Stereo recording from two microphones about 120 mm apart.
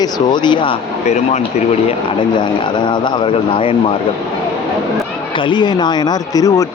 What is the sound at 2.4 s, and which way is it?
A man's voice, 40° left (ahead or behind).